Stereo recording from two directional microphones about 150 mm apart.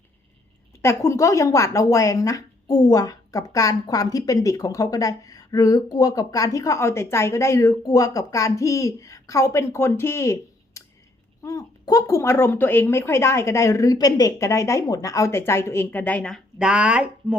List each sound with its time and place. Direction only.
0.8 s a woman's voice: 20° left (ahead or behind)
16.6 s speech: 5° right (ahead or behind)